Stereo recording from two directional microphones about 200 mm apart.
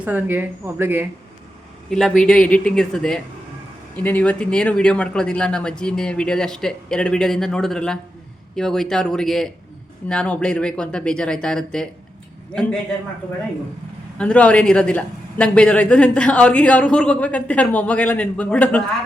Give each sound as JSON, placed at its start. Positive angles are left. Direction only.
{"t": 0.0, "sound": "speech", "side_deg": -10}
{"t": 1.9, "sound": "speech", "side_deg": 0}
{"t": 14.2, "sound": "speech", "side_deg": 5}